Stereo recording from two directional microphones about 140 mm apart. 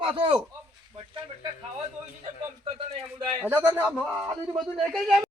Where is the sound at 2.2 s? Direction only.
50° right (ahead or behind).